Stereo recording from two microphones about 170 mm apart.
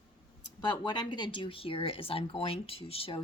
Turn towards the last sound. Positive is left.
turn(degrees=35)  # may be behind; listen again after turning